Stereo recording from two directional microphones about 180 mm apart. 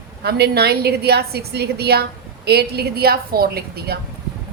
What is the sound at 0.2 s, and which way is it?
A woman's voice, 65° right (ahead or behind).